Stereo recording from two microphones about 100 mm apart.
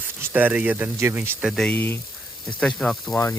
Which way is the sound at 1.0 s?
25° right (ahead or behind).